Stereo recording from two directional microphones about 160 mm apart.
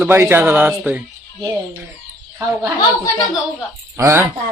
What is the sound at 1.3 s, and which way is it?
Speech, 20° right (ahead or behind).